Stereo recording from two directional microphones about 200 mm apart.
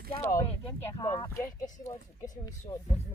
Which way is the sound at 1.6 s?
35° left (ahead or behind).